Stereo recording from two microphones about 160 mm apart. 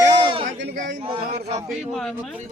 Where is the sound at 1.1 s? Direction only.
45° right (ahead or behind).